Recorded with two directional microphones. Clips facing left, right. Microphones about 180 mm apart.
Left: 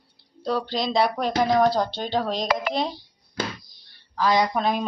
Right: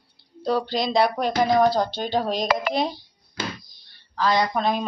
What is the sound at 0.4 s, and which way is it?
Speech, 5° right (ahead or behind).